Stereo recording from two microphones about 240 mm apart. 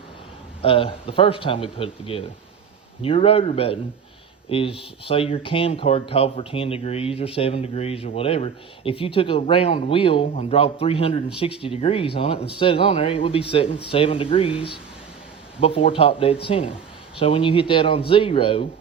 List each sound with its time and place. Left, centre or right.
0.6 s speech: left